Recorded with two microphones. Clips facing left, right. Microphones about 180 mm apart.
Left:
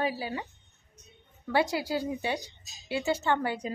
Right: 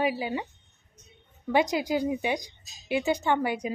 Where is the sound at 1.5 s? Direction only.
20° right (ahead or behind).